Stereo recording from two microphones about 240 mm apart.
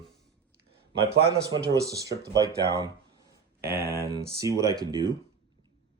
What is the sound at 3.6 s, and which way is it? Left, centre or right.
Speech, right.